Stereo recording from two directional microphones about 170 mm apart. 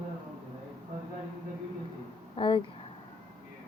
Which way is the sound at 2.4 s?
30° left (ahead or behind).